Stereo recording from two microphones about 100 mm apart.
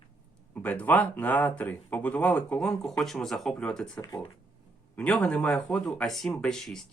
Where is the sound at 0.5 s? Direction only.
15° left (ahead or behind).